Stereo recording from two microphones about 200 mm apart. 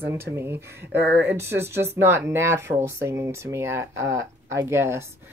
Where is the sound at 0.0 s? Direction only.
10° right (ahead or behind).